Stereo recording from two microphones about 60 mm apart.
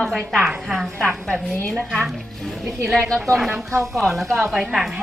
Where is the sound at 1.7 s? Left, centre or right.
Centre.